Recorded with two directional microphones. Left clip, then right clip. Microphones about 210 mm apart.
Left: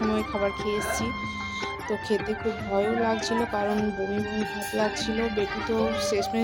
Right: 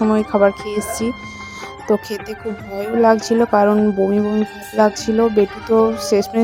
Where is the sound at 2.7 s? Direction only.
45° right (ahead or behind).